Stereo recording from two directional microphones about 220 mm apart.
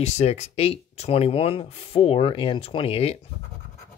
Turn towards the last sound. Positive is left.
turn(degrees=25)  # may be behind; listen again after turning